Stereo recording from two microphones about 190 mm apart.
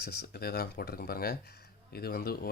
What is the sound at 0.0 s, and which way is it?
Speech, 55° left (ahead or behind).